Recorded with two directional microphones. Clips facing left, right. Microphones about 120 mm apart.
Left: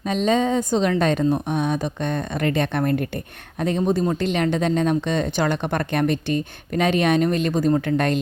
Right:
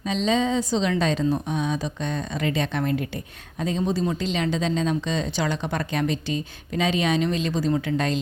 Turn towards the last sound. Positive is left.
turn(degrees=45)  # may be behind; listen again after turning